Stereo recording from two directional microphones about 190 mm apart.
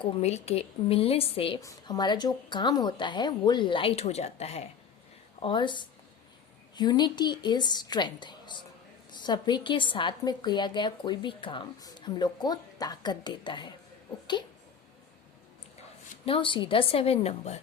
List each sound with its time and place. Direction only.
0.0 s a woman's voice: 35° left (ahead or behind)
16.2 s a woman's voice: 25° left (ahead or behind)